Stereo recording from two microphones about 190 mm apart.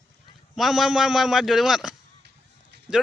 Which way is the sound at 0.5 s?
Centre (ahead or behind).